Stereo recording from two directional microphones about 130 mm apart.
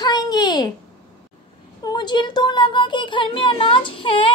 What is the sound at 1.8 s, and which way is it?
Speech, 35° left (ahead or behind).